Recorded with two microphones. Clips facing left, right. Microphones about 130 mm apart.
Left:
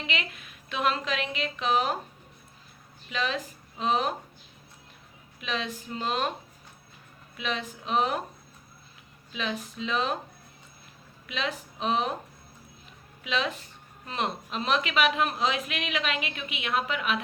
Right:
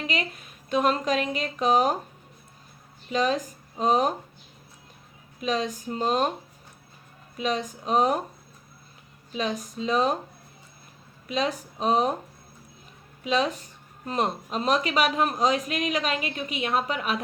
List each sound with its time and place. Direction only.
0.0 s speech: 40° right (ahead or behind)
3.1 s speech: 40° right (ahead or behind)
5.4 s speech: 40° right (ahead or behind)
7.3 s speech: 40° right (ahead or behind)
9.3 s speech: 40° right (ahead or behind)
11.3 s speech: 40° right (ahead or behind)
13.2 s speech: 40° right (ahead or behind)